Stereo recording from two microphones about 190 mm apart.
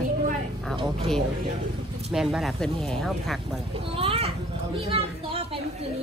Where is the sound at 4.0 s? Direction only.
30° right (ahead or behind).